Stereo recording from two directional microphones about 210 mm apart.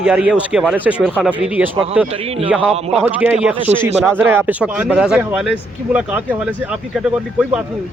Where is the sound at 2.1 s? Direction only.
30° right (ahead or behind).